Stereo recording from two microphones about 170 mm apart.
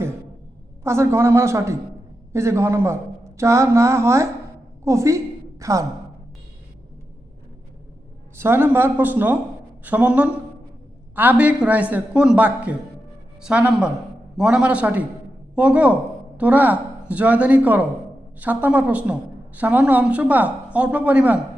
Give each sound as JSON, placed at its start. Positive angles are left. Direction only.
{"t": 0.9, "sound": "speech", "side_deg": -15}
{"t": 4.8, "sound": "a sound", "side_deg": -15}
{"t": 8.4, "sound": "speech", "side_deg": -15}